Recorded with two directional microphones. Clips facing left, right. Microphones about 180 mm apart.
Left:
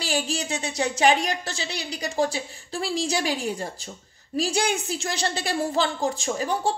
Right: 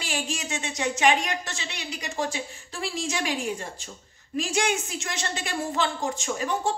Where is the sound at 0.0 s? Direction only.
35° left (ahead or behind).